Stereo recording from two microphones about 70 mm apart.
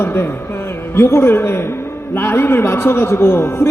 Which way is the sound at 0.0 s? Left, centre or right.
Left.